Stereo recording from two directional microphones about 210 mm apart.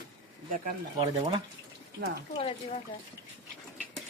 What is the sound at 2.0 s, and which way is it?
Speech, 60° right (ahead or behind).